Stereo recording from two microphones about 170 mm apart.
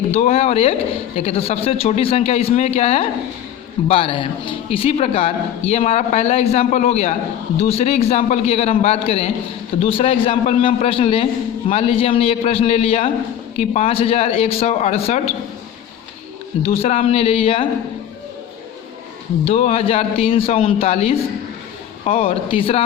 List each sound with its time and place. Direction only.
0.1 s a man's voice: 40° left (ahead or behind)
16.6 s a man's voice: 35° left (ahead or behind)
19.5 s a man's voice: 40° left (ahead or behind)